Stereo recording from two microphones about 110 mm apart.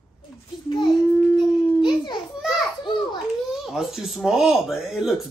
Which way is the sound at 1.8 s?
40° left (ahead or behind).